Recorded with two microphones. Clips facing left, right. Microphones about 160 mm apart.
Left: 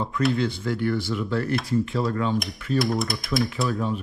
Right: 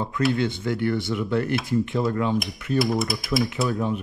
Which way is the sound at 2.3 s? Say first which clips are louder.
Right 1 dB; centre (ahead or behind).